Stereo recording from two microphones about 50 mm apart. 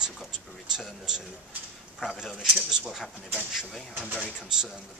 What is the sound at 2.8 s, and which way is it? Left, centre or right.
Speech, centre.